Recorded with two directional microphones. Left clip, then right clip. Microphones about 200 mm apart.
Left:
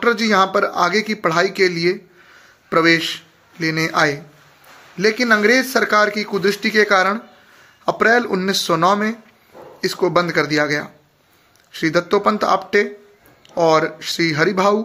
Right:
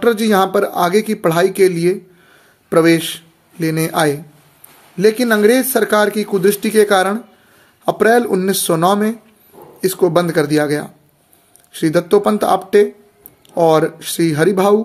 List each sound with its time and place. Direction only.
0.0 s speech: 40° right (ahead or behind)